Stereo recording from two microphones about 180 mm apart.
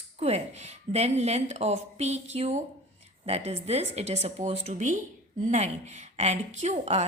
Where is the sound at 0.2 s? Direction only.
35° right (ahead or behind).